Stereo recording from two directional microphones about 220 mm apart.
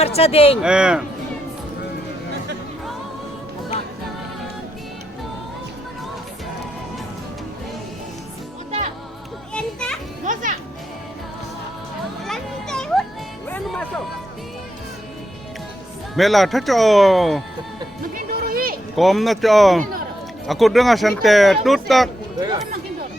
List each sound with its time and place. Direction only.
0.0 s speech: 25° left (ahead or behind)
0.6 s speech: 5° right (ahead or behind)
9.5 s children playing: 5° left (ahead or behind)
10.2 s music: 35° right (ahead or behind)
12.3 s children playing: 5° left (ahead or behind)
13.5 s music: 5° left (ahead or behind)
16.1 s speech: centre (ahead or behind)
18.1 s music: 40° right (ahead or behind)
18.9 s speech: centre (ahead or behind)
22.4 s a sound: 20° right (ahead or behind)